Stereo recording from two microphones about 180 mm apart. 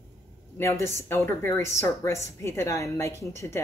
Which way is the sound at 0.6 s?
15° left (ahead or behind).